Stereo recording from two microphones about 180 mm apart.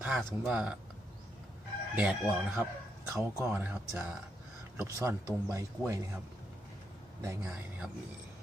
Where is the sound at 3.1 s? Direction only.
15° right (ahead or behind).